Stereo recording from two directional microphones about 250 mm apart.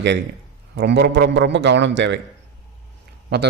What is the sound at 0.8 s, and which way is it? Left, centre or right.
A man's voice, right.